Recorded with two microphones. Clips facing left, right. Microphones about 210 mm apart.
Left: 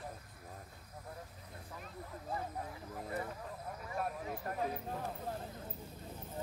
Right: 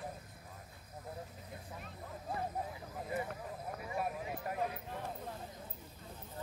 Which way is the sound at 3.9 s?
10° right (ahead or behind).